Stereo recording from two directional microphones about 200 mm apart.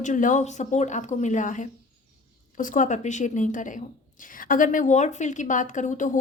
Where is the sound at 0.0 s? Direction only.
40° left (ahead or behind).